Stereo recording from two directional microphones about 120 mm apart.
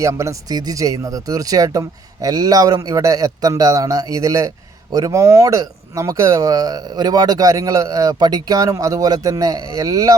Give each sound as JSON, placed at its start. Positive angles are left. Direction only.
{"t": 0.0, "sound": "speech", "side_deg": -25}